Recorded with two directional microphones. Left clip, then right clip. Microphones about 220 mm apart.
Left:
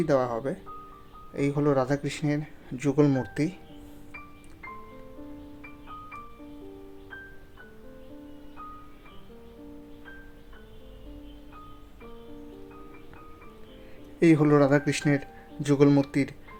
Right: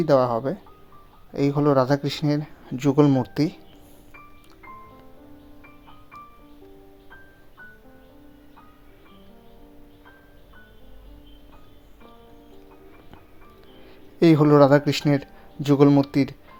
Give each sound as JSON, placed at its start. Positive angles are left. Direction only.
{"t": 0.0, "sound": "speech", "side_deg": -15}
{"t": 14.2, "sound": "speech", "side_deg": -20}